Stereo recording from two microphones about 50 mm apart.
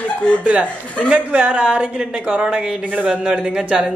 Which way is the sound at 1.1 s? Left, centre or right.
Right.